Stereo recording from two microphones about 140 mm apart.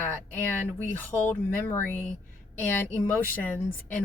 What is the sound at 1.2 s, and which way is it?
A woman's voice, 15° left (ahead or behind).